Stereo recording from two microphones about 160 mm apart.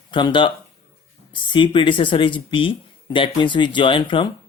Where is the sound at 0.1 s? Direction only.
30° left (ahead or behind).